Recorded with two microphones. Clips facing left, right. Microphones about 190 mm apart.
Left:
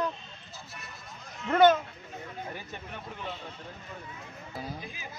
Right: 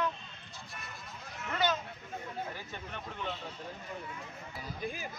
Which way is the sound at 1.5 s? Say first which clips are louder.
Left 11 dB; 55° left (ahead or behind).